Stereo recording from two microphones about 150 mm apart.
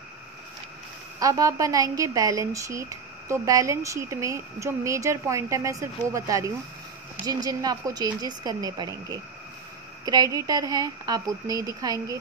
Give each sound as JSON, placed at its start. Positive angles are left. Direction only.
{"t": 1.2, "sound": "speech", "side_deg": -25}